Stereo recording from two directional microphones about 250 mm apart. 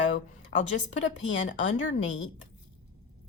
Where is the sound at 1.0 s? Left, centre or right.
Left.